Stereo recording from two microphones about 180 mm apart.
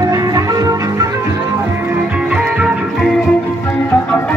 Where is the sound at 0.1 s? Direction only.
20° right (ahead or behind).